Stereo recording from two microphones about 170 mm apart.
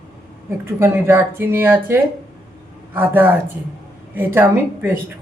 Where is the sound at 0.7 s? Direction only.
15° right (ahead or behind).